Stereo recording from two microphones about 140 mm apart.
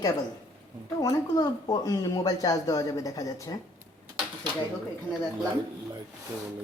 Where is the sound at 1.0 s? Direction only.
25° left (ahead or behind).